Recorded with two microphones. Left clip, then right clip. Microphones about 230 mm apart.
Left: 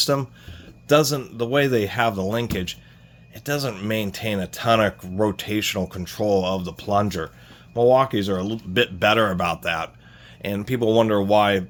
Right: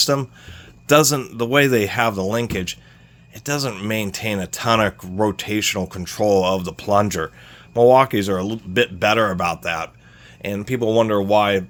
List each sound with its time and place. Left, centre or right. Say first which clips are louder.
0.0 s speech: right 3 dB; right
0.9 s speech: right 3 dB; right
8.7 s a man's voice: right 1 dB; centre